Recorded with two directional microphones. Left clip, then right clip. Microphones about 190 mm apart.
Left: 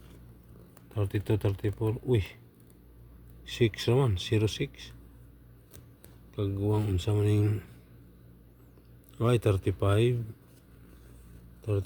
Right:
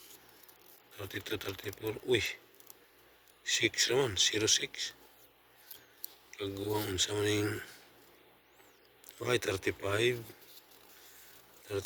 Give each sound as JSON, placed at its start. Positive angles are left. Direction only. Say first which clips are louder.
{"t": 1.0, "sound": "speech", "louder": "left 6 dB", "side_deg": 20}
{"t": 3.4, "sound": "speech", "louder": "left 1 dB", "side_deg": 10}
{"t": 6.3, "sound": "speech", "louder": "left 4 dB", "side_deg": 5}
{"t": 9.1, "sound": "speech", "louder": "left 4 dB", "side_deg": 10}